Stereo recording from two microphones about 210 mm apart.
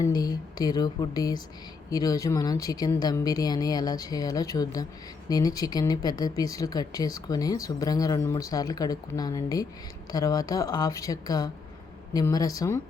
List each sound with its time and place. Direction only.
0.0 s speech: 20° left (ahead or behind)